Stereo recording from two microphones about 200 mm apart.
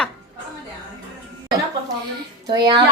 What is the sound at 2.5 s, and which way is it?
Speech, 20° right (ahead or behind).